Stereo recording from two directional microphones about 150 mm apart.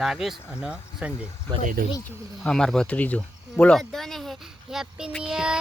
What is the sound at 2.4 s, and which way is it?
Speech, 5° left (ahead or behind).